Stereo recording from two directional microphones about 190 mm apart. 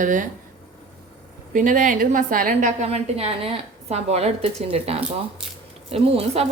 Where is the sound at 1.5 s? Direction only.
45° right (ahead or behind).